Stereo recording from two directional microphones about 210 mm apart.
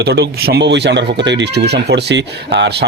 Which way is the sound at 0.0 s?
50° right (ahead or behind).